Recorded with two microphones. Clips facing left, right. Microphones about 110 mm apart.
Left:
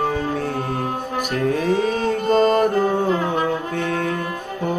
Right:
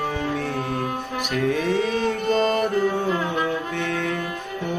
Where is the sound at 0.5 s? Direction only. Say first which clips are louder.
Left 2 dB; 40° left (ahead or behind).